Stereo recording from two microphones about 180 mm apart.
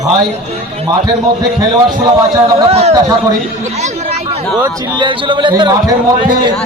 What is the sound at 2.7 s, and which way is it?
Speech, 35° right (ahead or behind).